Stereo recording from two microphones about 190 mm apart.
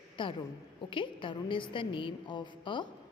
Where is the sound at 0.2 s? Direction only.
25° left (ahead or behind).